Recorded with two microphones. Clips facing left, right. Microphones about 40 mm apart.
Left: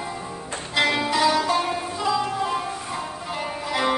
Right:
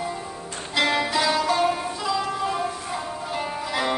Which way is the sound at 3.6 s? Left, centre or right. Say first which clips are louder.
Left 3 dB; centre.